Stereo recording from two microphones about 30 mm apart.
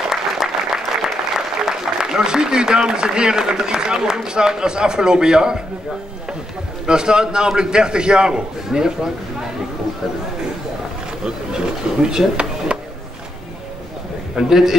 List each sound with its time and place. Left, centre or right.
0.1 s applause: centre
1.7 s a man's voice: right
6.9 s a man's voice: right
11.2 s a man's voice: right
12.7 s a sound: right
14.3 s a man's voice: centre